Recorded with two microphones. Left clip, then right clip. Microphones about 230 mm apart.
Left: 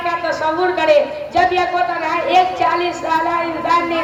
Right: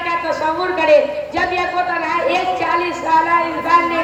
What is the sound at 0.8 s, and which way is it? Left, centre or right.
Speech, left.